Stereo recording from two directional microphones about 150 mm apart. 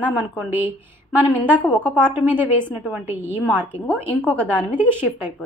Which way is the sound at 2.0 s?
10° right (ahead or behind).